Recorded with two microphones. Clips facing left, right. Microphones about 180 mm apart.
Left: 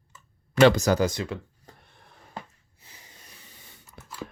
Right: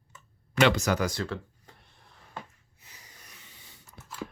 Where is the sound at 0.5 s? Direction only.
40° left (ahead or behind).